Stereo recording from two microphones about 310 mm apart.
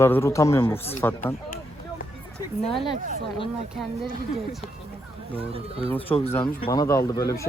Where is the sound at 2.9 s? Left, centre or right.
Right.